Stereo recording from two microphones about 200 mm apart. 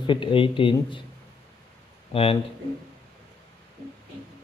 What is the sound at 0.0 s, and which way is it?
Speech, 25° left (ahead or behind).